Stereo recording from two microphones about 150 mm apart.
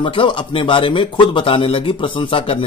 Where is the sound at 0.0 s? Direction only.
35° left (ahead or behind).